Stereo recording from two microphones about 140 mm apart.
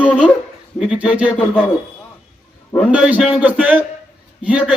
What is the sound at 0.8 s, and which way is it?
Speech, 5° right (ahead or behind).